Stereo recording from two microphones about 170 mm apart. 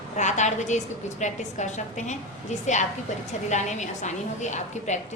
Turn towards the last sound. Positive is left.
turn(degrees=45)  # may be behind; listen again after turning